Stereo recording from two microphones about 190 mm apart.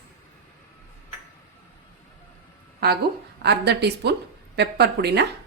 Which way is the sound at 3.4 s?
60° right (ahead or behind).